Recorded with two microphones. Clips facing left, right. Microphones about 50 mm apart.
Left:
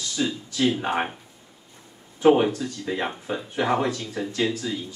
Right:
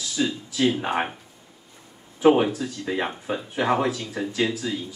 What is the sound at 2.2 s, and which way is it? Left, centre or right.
Speech, centre.